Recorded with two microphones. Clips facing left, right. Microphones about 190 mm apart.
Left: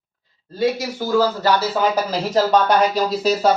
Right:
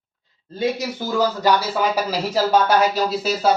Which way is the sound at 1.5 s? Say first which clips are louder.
Left 1 dB; 15° right (ahead or behind).